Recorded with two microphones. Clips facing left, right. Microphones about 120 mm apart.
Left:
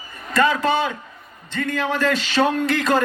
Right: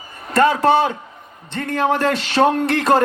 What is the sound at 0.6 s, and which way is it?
A man's voice, 55° right (ahead or behind).